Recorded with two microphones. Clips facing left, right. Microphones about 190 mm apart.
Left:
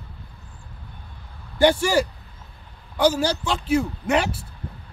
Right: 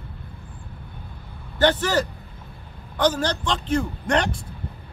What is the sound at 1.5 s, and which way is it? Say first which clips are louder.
Speech: left 2 dB; 10° left (ahead or behind).